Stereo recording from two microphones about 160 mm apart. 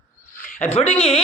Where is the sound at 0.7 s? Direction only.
40° left (ahead or behind).